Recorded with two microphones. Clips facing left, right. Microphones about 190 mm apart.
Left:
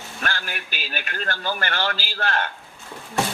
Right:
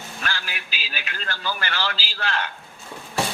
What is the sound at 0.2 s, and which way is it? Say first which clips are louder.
A man's voice: left 3 dB; 50° left (ahead or behind).